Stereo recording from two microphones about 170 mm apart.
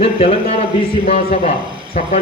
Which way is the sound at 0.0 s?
35° left (ahead or behind).